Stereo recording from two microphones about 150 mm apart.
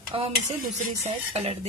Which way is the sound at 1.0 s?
45° right (ahead or behind).